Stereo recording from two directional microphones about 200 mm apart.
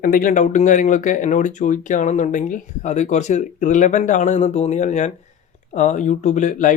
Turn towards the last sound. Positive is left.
turn(degrees=40)  # may be behind; listen again after turning